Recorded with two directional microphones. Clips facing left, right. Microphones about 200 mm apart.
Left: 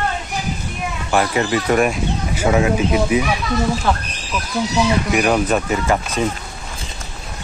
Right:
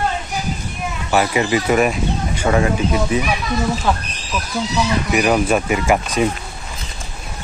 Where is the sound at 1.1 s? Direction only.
5° right (ahead or behind); by 3.2 s 10° left (ahead or behind).